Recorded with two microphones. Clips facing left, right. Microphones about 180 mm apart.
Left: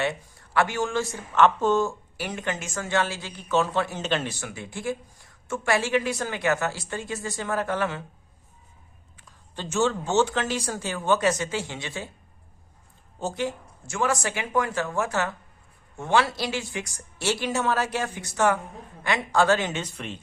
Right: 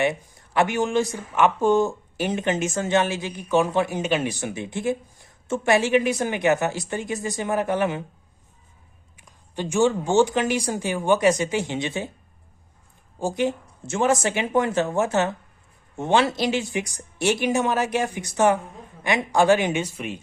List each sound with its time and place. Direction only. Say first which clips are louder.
0.0 s speech: right 4 dB; 20° right (ahead or behind)
9.1 s speech: right 7 dB; 15° right (ahead or behind)
13.1 s speech: right 5 dB; 15° right (ahead or behind)